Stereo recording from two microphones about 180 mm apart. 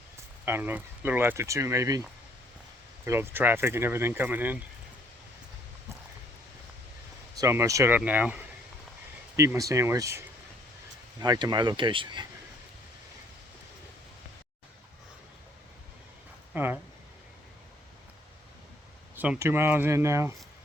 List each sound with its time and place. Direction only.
0.4 s speech: 10° right (ahead or behind)
3.1 s speech: 10° right (ahead or behind)
7.3 s speech: 15° right (ahead or behind)
16.5 s speech: 10° right (ahead or behind)
19.1 s speech: 10° right (ahead or behind)